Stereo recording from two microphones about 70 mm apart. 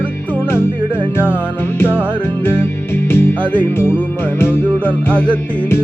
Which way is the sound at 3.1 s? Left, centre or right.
Left.